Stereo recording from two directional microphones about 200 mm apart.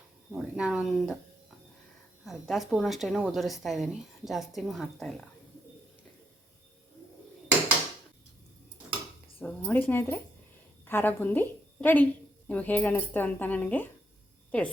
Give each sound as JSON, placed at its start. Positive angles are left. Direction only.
{"t": 0.3, "sound": "a woman's voice", "side_deg": -5}
{"t": 2.2, "sound": "a woman's voice", "side_deg": 0}
{"t": 9.4, "sound": "a woman's voice", "side_deg": 5}